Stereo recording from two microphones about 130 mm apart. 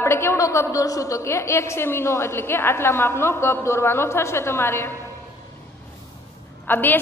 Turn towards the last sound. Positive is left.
turn(degrees=15)  # may be behind; listen again after turning